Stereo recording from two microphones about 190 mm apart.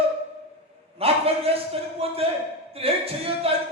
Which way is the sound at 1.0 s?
30° right (ahead or behind).